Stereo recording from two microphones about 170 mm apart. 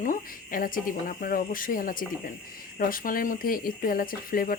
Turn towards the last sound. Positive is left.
turn(degrees=55)  # may be behind; listen again after turning